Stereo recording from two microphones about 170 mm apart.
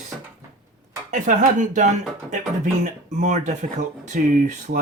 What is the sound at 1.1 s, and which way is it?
Speech, 50° right (ahead or behind).